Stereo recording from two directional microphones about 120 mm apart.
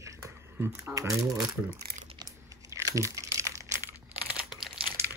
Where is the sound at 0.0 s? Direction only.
25° right (ahead or behind).